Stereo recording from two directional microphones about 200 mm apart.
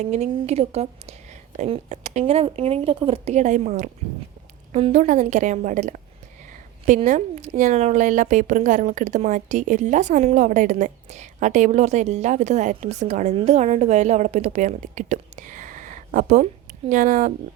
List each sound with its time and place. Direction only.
0.0 s a woman's voice: 35° right (ahead or behind)